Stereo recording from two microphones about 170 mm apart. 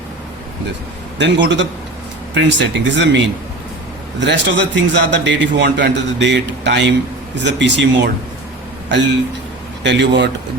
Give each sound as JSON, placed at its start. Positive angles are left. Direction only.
{"t": 1.2, "sound": "a man's voice", "side_deg": -90}
{"t": 4.2, "sound": "a man's voice", "side_deg": -90}
{"t": 9.8, "sound": "a man's voice", "side_deg": -90}